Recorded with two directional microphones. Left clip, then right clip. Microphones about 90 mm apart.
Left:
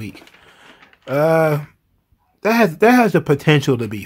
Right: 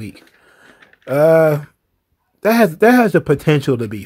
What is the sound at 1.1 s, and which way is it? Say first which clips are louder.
Typing: right 4 dB; 45° right (ahead or behind).